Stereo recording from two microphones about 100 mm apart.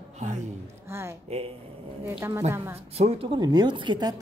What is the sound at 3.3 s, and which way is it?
Speech, 45° right (ahead or behind).